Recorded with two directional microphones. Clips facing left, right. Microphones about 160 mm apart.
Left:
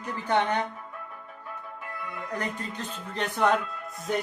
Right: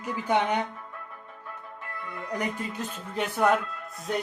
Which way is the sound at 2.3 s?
10° right (ahead or behind).